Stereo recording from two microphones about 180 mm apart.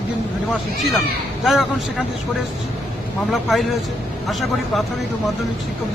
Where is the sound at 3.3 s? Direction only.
Centre (ahead or behind).